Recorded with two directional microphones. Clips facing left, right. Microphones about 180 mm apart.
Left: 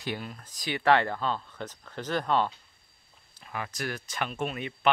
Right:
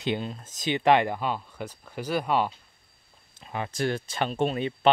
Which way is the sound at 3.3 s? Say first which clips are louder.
Right 6 dB; 25° right (ahead or behind).